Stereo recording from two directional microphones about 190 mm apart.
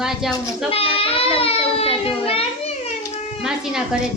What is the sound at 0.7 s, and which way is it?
A child's voice, 30° left (ahead or behind).